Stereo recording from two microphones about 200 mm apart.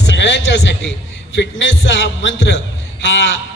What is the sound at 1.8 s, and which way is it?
Heart sounds, 65° left (ahead or behind).